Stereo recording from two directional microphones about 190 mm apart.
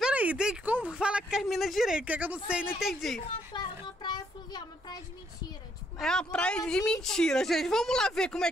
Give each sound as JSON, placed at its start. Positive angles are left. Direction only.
{"t": 0.0, "sound": "speech", "side_deg": -10}
{"t": 3.8, "sound": "speech", "side_deg": 20}
{"t": 5.9, "sound": "speech", "side_deg": 5}